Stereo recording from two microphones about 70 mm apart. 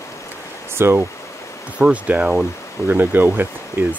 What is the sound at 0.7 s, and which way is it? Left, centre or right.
Speech, right.